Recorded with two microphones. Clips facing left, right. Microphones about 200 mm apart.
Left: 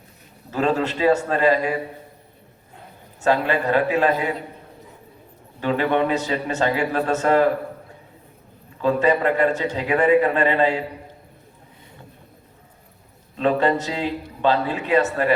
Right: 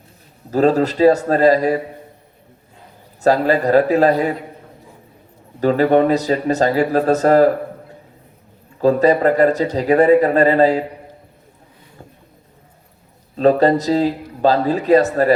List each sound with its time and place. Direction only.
0.5 s a man's voice: 40° right (ahead or behind)
3.2 s a man's voice: 40° right (ahead or behind)
5.5 s a man's voice: 40° right (ahead or behind)
8.8 s a man's voice: 40° right (ahead or behind)
13.3 s a man's voice: 40° right (ahead or behind)